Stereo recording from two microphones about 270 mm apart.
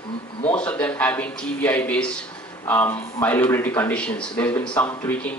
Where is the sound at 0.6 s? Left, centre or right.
Centre.